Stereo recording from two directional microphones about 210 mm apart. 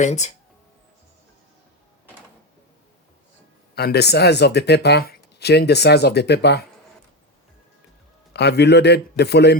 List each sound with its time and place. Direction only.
0.0 s speech: 35° left (ahead or behind)
3.8 s speech: 50° left (ahead or behind)
8.3 s speech: 55° left (ahead or behind)